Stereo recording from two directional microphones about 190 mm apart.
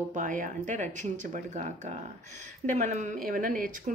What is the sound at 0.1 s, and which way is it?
A woman's voice, 40° right (ahead or behind).